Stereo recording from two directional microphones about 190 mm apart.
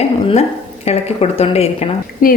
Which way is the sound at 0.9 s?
35° left (ahead or behind).